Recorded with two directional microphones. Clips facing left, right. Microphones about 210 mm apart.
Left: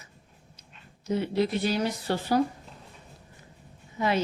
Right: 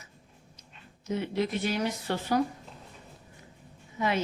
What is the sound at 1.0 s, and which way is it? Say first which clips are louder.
A woman's voice: left 3 dB; 35° left (ahead or behind).